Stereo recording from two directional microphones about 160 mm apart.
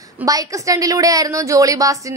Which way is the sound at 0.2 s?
20° right (ahead or behind).